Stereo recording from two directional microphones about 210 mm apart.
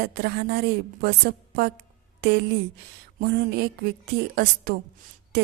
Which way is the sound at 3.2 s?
50° right (ahead or behind).